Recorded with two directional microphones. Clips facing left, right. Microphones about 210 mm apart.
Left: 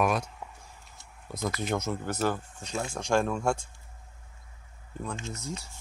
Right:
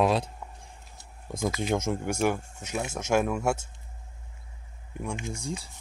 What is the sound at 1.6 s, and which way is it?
Speech, 20° right (ahead or behind).